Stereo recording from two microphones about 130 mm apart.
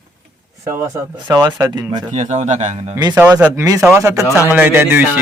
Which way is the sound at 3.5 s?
25° right (ahead or behind).